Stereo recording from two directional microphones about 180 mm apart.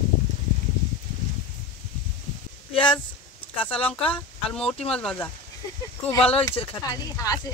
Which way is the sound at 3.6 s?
30° left (ahead or behind).